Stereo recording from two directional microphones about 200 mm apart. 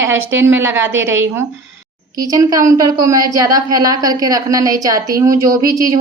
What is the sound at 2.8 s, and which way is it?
Speech, 20° right (ahead or behind).